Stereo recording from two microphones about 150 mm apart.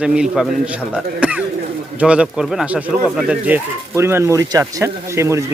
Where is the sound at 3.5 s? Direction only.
15° right (ahead or behind).